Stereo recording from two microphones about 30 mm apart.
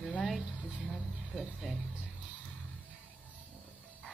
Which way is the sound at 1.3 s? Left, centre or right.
Centre.